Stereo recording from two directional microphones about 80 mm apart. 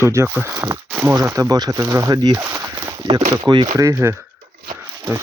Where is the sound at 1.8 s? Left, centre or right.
Right.